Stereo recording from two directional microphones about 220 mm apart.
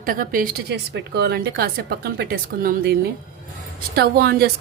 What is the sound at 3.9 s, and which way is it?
Speech, 45° right (ahead or behind).